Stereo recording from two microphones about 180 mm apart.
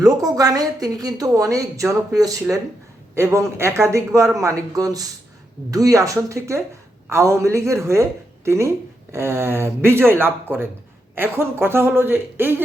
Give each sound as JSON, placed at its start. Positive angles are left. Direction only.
{"t": 0.0, "sound": "a woman's voice", "side_deg": -20}